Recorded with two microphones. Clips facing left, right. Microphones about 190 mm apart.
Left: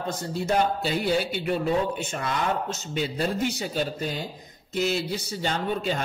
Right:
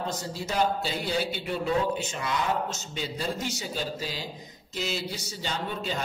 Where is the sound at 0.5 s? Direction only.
55° left (ahead or behind).